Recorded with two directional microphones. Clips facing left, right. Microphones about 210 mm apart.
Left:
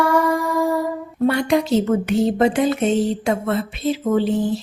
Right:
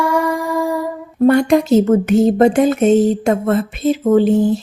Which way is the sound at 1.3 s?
45° right (ahead or behind).